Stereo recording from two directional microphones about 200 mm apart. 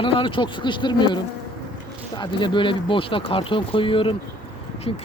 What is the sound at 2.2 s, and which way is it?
Speech, 25° left (ahead or behind).